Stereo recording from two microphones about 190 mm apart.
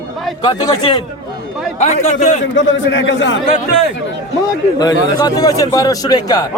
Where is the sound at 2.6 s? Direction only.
75° left (ahead or behind).